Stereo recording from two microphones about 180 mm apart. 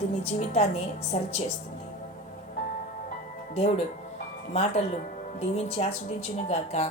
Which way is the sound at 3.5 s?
35° left (ahead or behind).